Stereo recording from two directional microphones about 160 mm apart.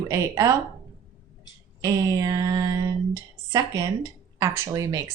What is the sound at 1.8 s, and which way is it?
Speech, 20° right (ahead or behind).